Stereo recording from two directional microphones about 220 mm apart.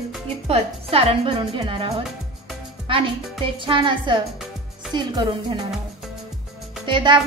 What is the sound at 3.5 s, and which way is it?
A woman's voice, 25° right (ahead or behind).